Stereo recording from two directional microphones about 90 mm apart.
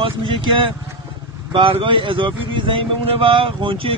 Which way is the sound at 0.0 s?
70° right (ahead or behind).